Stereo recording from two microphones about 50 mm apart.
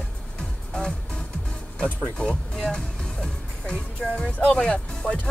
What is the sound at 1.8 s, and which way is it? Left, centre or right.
Speech, centre.